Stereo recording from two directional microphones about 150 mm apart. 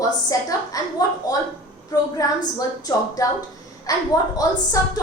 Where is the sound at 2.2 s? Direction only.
25° left (ahead or behind).